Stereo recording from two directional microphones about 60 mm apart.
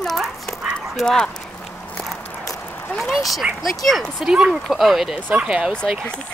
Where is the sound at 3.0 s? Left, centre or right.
Centre.